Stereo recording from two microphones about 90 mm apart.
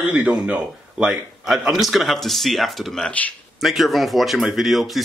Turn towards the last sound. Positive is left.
turn(degrees=0)  # may be behind; listen again after turning